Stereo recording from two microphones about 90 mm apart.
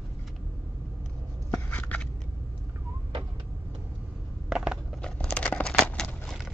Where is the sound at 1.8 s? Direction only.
15° left (ahead or behind).